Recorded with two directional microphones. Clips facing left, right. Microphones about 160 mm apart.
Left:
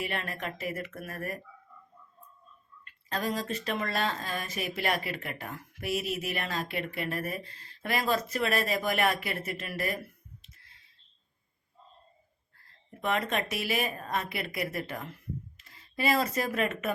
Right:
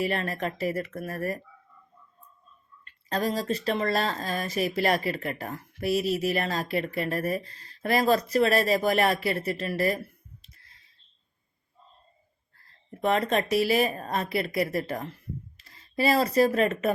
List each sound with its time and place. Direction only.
0.0 s speech: 35° right (ahead or behind)
2.8 s speech: 35° right (ahead or behind)
10.4 s music: 35° right (ahead or behind)
13.0 s speech: 35° right (ahead or behind)